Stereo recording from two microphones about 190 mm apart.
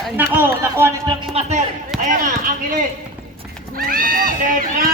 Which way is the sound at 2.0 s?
45° right (ahead or behind).